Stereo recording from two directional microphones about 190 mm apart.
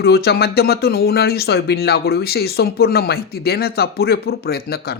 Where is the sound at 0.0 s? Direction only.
55° left (ahead or behind).